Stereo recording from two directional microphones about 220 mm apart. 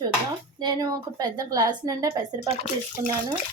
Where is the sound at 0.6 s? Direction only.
20° right (ahead or behind).